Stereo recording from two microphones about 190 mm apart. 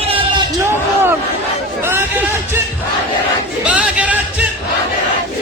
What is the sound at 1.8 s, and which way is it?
Chatter, 10° right (ahead or behind).